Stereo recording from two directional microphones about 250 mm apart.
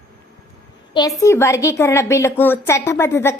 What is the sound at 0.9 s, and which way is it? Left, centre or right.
Speech, centre.